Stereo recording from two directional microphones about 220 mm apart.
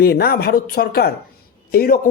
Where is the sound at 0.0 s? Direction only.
45° left (ahead or behind).